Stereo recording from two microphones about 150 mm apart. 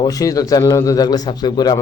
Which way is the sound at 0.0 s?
25° left (ahead or behind).